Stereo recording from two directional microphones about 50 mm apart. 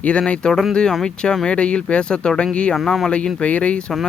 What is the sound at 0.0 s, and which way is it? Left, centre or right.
Speech, left.